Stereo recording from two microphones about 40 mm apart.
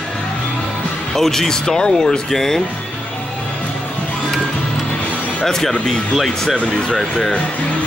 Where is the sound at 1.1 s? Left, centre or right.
Centre.